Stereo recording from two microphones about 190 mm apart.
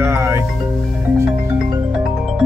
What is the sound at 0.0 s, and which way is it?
Music, 15° right (ahead or behind).